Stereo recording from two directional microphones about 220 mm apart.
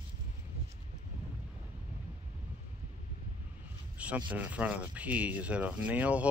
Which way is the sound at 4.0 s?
5° right (ahead or behind).